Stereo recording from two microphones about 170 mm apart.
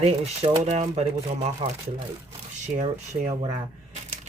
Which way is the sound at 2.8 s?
45° right (ahead or behind).